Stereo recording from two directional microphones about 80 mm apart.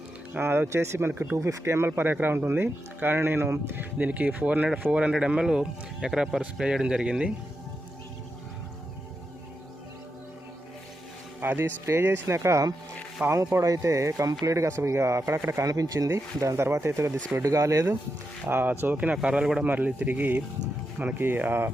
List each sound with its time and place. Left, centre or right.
0.3 s speech: right; by 7.3 s centre
11.3 s speech: right
15.6 s speech: right
16.0 s speech: right
18.4 s speech: right
19.6 s speech: right